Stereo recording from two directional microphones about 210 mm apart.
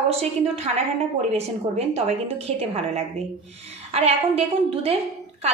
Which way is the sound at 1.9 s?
30° right (ahead or behind).